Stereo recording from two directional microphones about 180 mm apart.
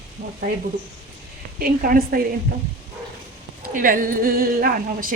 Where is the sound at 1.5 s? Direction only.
55° right (ahead or behind).